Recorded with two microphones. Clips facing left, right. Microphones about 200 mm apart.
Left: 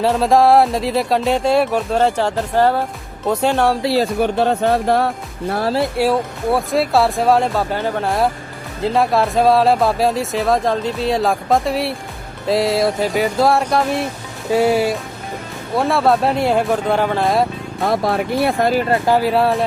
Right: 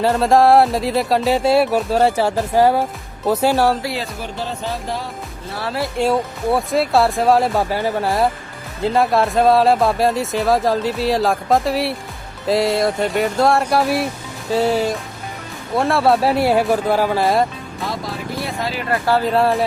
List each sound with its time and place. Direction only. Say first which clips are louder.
0.0 s speech: even; centre (ahead or behind)
4.2 s speech: left 10 dB; 65° left (ahead or behind)
6.0 s speech: left 1 dB; centre (ahead or behind)
14.5 s speech: left 2 dB; 10° left (ahead or behind)
15.7 s speech: even; centre (ahead or behind)
17.8 s speech: left 9 dB; 60° left (ahead or behind)
18.9 s speech: left 2 dB; 15° left (ahead or behind)
19.3 s speech: even; centre (ahead or behind)